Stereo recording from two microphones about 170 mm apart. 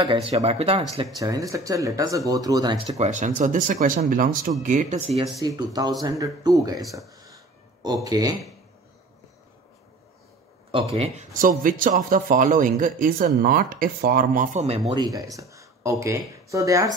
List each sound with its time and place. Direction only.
0.0 s speech: 30° right (ahead or behind)
1.2 s speech: 20° right (ahead or behind)
2.9 s speech: 45° right (ahead or behind)
5.4 s a man's voice: 25° right (ahead or behind)
10.7 s speech: 35° right (ahead or behind)
11.3 s speech: 50° right (ahead or behind)
14.9 s speech: 20° right (ahead or behind)